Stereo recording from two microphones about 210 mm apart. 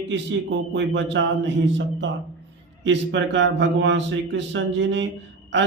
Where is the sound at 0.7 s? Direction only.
60° right (ahead or behind).